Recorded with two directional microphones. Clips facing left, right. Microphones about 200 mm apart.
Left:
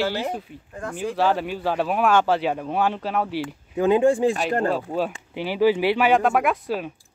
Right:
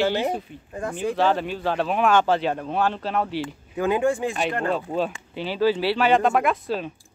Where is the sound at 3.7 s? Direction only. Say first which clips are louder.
Left 4 dB; 25° left (ahead or behind).